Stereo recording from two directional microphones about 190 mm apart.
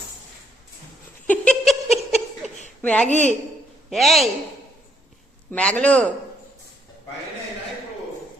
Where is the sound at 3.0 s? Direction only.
40° right (ahead or behind).